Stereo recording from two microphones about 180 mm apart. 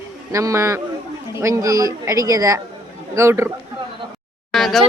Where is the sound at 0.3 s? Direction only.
15° right (ahead or behind).